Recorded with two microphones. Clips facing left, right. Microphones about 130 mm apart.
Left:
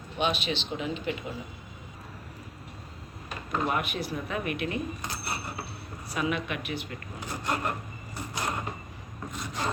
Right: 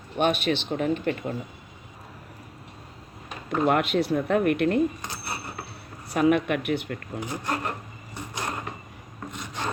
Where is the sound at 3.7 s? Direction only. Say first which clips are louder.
Right 8 dB; 70° right (ahead or behind).